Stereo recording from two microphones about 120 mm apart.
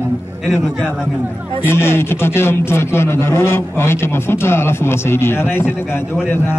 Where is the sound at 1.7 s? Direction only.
20° left (ahead or behind).